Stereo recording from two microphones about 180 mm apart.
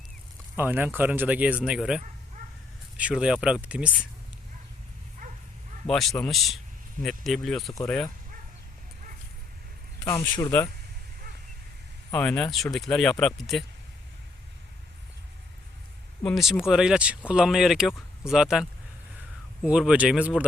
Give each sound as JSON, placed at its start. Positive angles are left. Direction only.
{"t": 0.5, "sound": "speech", "side_deg": -10}
{"t": 3.0, "sound": "speech", "side_deg": -5}
{"t": 5.2, "sound": "bow-wow", "side_deg": -45}
{"t": 5.9, "sound": "speech", "side_deg": 0}
{"t": 10.0, "sound": "a man's voice", "side_deg": 20}
{"t": 12.1, "sound": "speech", "side_deg": 5}
{"t": 16.2, "sound": "speech", "side_deg": 0}